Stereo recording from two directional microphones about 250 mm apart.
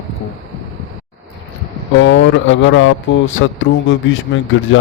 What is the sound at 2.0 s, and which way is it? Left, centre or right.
A man's voice, left.